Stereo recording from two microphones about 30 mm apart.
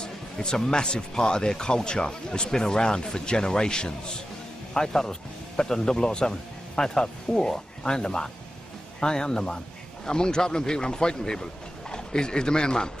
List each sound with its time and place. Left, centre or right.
0.0 s a man's voice: left